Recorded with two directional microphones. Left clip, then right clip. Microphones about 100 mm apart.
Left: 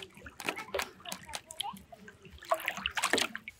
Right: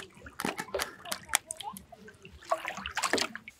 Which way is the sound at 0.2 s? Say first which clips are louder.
Right 2 dB; 10° left (ahead or behind).